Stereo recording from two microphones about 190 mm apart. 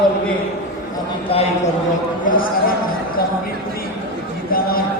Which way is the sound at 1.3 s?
30° left (ahead or behind).